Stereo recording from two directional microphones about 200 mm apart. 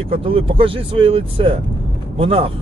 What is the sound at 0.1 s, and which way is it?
Speech, 30° right (ahead or behind).